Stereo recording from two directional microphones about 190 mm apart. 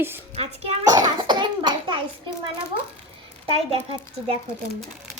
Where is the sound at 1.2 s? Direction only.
25° right (ahead or behind).